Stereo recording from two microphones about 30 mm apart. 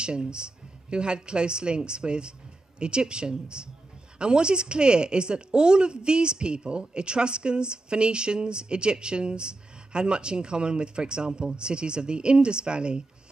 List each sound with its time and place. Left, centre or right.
0.0 s speech: right